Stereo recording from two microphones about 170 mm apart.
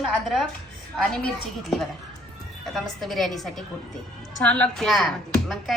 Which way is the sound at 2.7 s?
Centre (ahead or behind).